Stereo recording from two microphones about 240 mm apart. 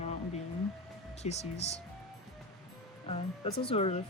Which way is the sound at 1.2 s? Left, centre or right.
Left.